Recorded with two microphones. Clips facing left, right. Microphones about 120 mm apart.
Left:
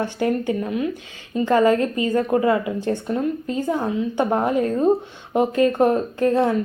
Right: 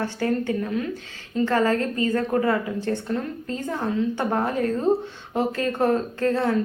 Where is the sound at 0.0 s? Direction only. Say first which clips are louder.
Left 3 dB; 15° left (ahead or behind).